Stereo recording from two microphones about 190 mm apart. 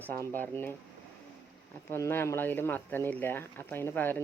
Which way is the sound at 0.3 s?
10° left (ahead or behind).